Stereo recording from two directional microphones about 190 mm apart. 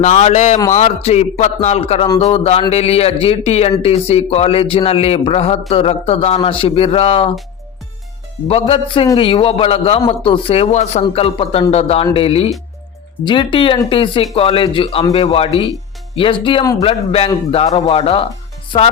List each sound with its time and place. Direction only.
0.0 s a man's voice: 40° left (ahead or behind)
8.4 s a man's voice: 30° left (ahead or behind)